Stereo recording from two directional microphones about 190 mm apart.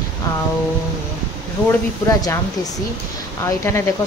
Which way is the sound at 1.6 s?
15° left (ahead or behind).